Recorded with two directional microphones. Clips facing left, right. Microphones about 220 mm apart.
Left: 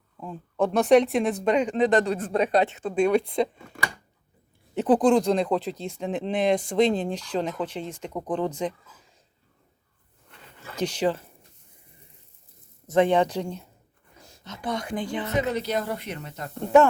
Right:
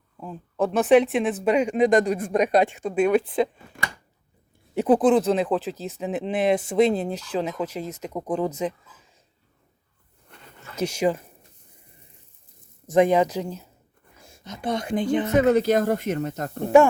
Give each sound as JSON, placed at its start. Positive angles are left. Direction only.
{"t": 0.2, "sound": "speech", "side_deg": -5}
{"t": 4.7, "sound": "speech", "side_deg": -10}
{"t": 10.8, "sound": "speech", "side_deg": -10}
{"t": 12.9, "sound": "speech", "side_deg": -10}
{"t": 15.3, "sound": "speech", "side_deg": -50}